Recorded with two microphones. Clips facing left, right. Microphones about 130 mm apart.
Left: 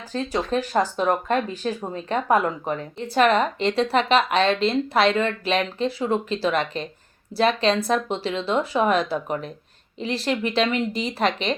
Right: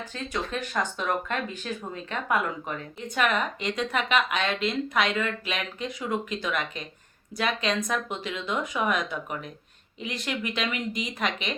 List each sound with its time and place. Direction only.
0.1 s speech: 35° left (ahead or behind)